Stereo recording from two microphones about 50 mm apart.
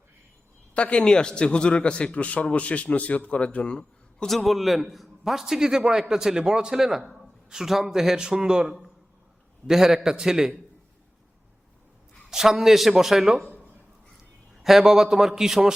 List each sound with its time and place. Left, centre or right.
0.7 s a man's voice: left
4.3 s a man's voice: centre
12.3 s a man's voice: centre
14.6 s a man's voice: centre